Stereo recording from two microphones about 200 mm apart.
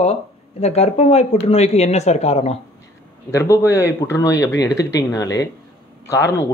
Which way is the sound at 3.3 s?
15° left (ahead or behind).